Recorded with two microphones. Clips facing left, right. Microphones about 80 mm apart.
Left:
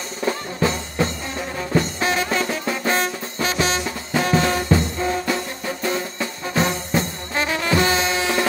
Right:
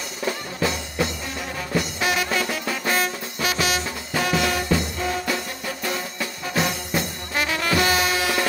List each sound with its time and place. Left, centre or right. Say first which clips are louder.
0.6 s music: left 2 dB; left